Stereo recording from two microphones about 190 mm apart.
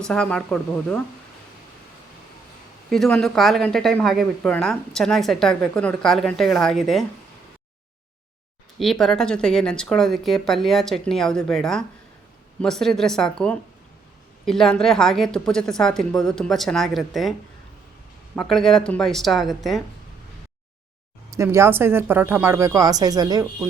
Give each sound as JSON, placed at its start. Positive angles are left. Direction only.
{"t": 0.1, "sound": "speech", "side_deg": 5}
{"t": 2.9, "sound": "speech", "side_deg": 5}
{"t": 8.8, "sound": "speech", "side_deg": 0}
{"t": 18.3, "sound": "speech", "side_deg": 0}
{"t": 21.2, "sound": "speech", "side_deg": -15}